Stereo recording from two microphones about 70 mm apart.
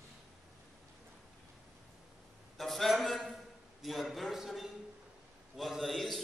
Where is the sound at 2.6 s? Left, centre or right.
Centre.